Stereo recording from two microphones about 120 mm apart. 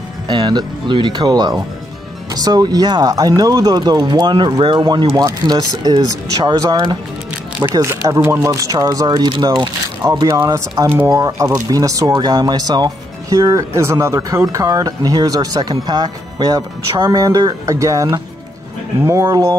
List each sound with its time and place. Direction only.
0.3 s speech: 40° right (ahead or behind)